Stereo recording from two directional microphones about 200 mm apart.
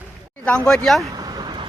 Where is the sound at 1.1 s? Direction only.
20° right (ahead or behind).